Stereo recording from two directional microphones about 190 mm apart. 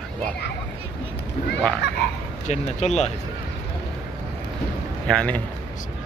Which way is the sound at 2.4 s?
35° left (ahead or behind).